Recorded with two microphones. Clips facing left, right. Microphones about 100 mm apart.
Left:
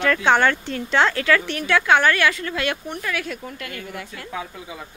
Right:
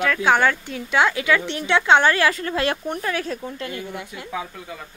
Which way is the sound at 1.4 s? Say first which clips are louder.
Even; 20° right (ahead or behind).